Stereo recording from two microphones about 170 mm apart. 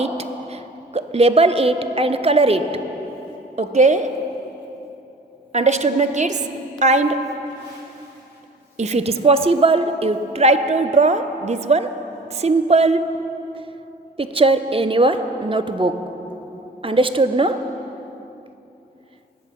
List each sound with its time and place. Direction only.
0.0 s a sound: 40° right (ahead or behind)
3.5 s a woman's voice: 40° right (ahead or behind)
5.5 s a woman's voice: 45° right (ahead or behind)
8.7 s a woman's voice: 40° right (ahead or behind)
13.5 s music: 30° right (ahead or behind)
14.2 s a woman's voice: 35° right (ahead or behind)